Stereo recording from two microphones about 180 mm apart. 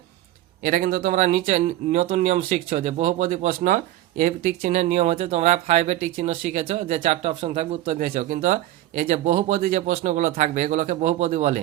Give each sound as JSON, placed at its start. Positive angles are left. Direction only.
{"t": 0.6, "sound": "speech", "side_deg": -50}
{"t": 7.9, "sound": "speech", "side_deg": -45}